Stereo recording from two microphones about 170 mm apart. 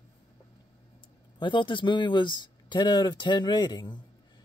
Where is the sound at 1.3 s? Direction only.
30° left (ahead or behind).